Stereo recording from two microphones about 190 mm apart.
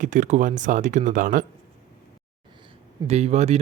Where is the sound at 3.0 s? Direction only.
35° right (ahead or behind).